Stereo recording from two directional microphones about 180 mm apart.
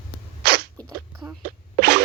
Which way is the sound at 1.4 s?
65° right (ahead or behind).